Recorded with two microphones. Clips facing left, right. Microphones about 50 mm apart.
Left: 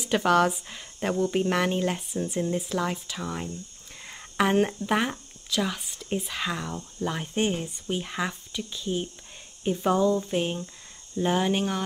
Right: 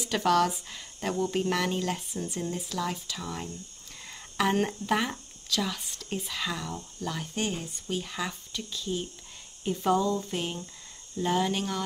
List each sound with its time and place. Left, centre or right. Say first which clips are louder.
0.0 s speech: left 3 dB; left
2.5 s speech: left 4 dB; left